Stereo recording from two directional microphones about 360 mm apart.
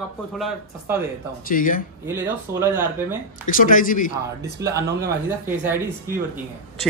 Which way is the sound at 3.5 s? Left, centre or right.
Left.